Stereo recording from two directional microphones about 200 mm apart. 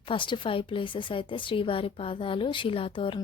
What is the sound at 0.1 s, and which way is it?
A woman's voice, 25° left (ahead or behind).